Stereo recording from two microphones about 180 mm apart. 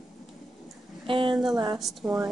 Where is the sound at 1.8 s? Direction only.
Centre (ahead or behind).